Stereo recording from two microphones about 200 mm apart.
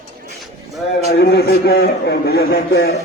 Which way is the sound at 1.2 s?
50° left (ahead or behind).